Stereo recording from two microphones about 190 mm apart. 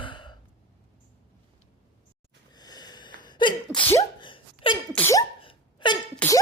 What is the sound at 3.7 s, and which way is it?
Sneeze, 10° left (ahead or behind).